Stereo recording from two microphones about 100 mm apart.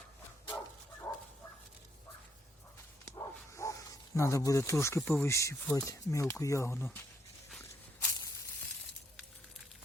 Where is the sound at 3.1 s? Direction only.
30° left (ahead or behind).